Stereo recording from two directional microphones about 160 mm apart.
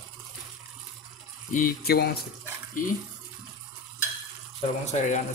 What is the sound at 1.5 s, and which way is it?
Speech, 70° left (ahead or behind).